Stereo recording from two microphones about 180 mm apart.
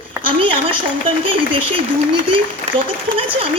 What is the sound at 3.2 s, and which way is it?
Speech, 30° right (ahead or behind).